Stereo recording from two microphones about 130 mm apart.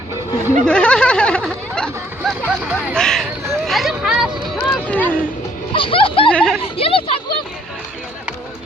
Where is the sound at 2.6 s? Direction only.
15° right (ahead or behind).